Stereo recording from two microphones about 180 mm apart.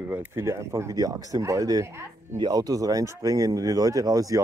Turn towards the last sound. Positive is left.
turn(degrees=-20)  # may be behind; listen again after turning